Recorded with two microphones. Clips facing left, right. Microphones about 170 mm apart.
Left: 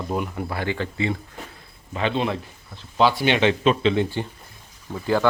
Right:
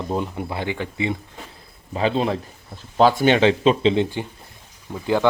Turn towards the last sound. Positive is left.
turn(degrees=-15)  # may be behind; listen again after turning